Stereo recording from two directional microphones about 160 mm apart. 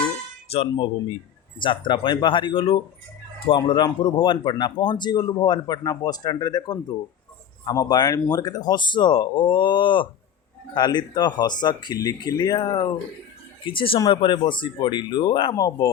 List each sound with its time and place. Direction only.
0.5 s speech: 40° left (ahead or behind); by 15.9 s 20° left (ahead or behind)